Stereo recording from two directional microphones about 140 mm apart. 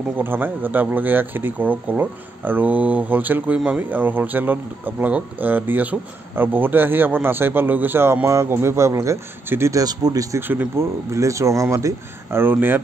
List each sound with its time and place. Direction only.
0.2 s speech: 15° right (ahead or behind)
10.4 s speech: 15° right (ahead or behind)